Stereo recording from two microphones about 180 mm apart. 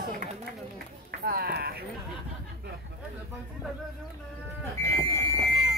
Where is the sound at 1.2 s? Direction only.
60° right (ahead or behind).